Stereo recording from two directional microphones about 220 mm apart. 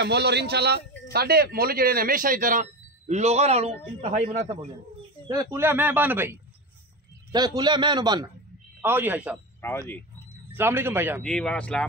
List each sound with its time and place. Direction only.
0.0 s a man's voice: 50° right (ahead or behind); by 4.6 s 30° right (ahead or behind)
5.3 s a man's voice: 15° right (ahead or behind)
9.6 s speech: 10° left (ahead or behind)
10.5 s speech: 10° right (ahead or behind)
11.2 s speech: 5° left (ahead or behind)